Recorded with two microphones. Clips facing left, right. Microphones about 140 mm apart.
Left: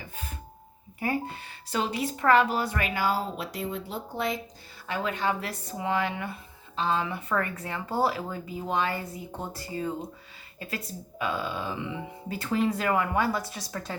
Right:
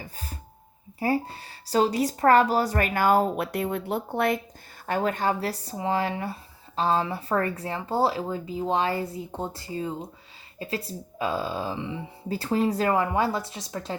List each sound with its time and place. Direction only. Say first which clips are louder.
0.0 s doorbell: right 1 dB; 35° right (ahead or behind)
0.9 s speech: right 4 dB; 35° right (ahead or behind); by 4.4 s 60° right (ahead or behind)
4.9 s speech: right 4 dB; 45° right (ahead or behind); by 13.9 s 20° right (ahead or behind)